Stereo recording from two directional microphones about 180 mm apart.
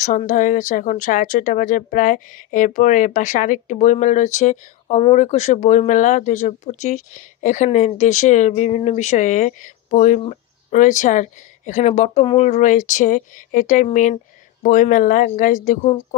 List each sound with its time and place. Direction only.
0.3 s a woman's voice: 45° left (ahead or behind)